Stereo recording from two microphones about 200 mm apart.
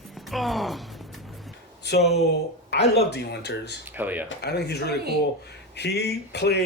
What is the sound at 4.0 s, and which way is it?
Speech, 10° right (ahead or behind).